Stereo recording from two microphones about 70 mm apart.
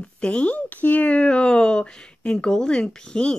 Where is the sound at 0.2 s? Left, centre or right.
Centre.